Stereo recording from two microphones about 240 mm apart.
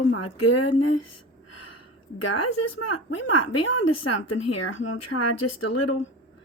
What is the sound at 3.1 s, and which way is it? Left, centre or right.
A woman's voice, left.